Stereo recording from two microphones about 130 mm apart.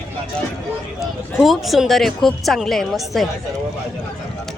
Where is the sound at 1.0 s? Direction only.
Centre (ahead or behind).